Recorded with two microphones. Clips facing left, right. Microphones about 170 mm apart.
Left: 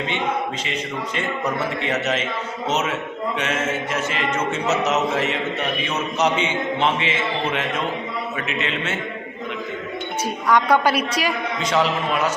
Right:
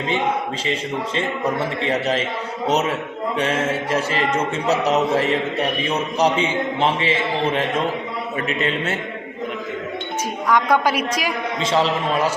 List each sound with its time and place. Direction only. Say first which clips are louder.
0.7 s a man's voice: right 3 dB; 30° right (ahead or behind)
10.5 s a man's voice: left 1 dB; 10° right (ahead or behind)
11.6 s a man's voice: right 1 dB; 30° right (ahead or behind)